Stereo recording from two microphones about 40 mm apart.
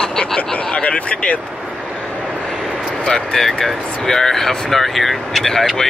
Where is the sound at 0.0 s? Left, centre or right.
Centre.